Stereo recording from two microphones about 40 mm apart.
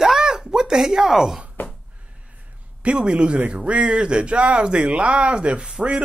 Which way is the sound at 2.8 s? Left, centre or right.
Right.